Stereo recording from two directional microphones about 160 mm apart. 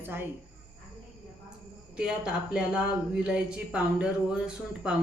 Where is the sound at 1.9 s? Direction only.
5° right (ahead or behind).